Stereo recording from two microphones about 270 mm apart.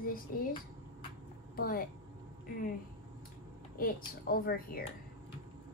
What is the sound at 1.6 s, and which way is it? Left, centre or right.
Speech, left.